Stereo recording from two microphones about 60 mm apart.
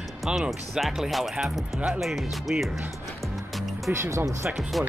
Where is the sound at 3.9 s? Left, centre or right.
Right.